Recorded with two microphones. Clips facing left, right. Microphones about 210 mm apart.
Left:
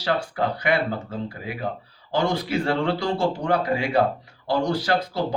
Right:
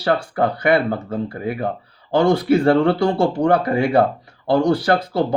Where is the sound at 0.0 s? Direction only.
55° right (ahead or behind).